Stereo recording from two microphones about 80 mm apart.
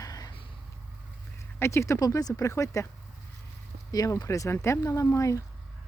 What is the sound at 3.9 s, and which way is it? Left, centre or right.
Speech, left.